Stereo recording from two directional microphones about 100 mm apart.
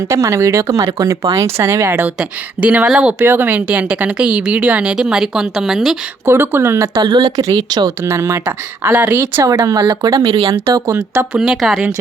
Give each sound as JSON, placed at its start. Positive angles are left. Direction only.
{"t": 0.1, "sound": "speech", "side_deg": -30}
{"t": 2.6, "sound": "speech", "side_deg": -15}
{"t": 6.2, "sound": "speech", "side_deg": -25}
{"t": 6.9, "sound": "speech", "side_deg": -45}
{"t": 8.0, "sound": "speech", "side_deg": -25}
{"t": 9.4, "sound": "speech", "side_deg": -35}
{"t": 10.8, "sound": "speech", "side_deg": -30}
{"t": 11.3, "sound": "a woman's voice", "side_deg": -5}